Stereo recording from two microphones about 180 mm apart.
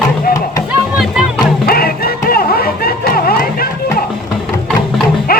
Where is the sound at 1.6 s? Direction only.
55° left (ahead or behind).